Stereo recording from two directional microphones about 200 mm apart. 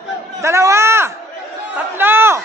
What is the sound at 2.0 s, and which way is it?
Chatter, 10° right (ahead or behind).